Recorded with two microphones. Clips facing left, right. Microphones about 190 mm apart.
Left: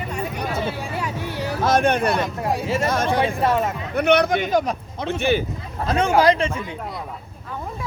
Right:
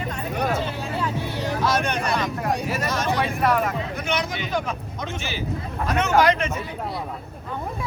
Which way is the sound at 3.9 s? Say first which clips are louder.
Left 9 dB; 60° left (ahead or behind).